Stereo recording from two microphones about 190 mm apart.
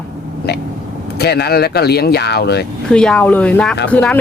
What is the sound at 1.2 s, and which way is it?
Speech, 60° left (ahead or behind).